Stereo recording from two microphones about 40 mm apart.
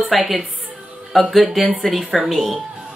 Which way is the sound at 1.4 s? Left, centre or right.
Centre.